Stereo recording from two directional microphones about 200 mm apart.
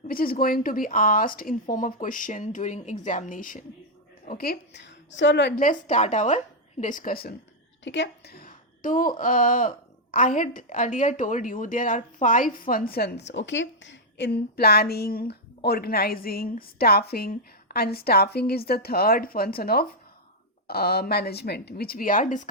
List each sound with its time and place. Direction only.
0.1 s a woman's voice: 45° left (ahead or behind)
5.5 s a woman's voice: 40° left (ahead or behind)
7.9 s a woman's voice: 60° left (ahead or behind); by 22.4 s 40° left (ahead or behind)